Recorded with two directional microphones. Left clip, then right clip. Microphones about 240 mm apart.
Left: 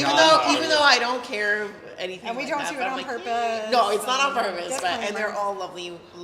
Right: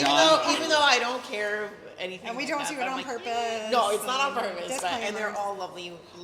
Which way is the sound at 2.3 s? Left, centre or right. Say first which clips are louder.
Left 3 dB; right.